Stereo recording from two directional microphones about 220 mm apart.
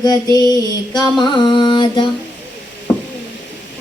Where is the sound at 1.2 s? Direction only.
20° left (ahead or behind).